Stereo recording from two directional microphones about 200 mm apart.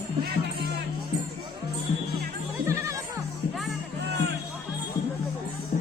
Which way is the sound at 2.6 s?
15° right (ahead or behind).